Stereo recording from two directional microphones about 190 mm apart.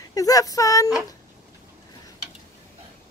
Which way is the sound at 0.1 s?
20° left (ahead or behind).